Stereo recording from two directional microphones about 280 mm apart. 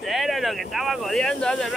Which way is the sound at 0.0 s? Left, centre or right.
Centre.